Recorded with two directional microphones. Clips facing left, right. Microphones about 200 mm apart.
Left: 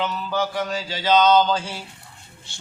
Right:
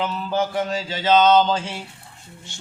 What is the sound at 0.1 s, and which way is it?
Mantra, 25° right (ahead or behind).